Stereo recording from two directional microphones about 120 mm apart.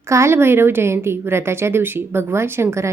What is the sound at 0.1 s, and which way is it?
A woman's voice, 20° right (ahead or behind).